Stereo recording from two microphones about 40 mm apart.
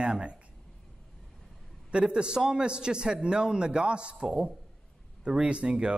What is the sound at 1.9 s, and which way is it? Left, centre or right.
A man's voice, right.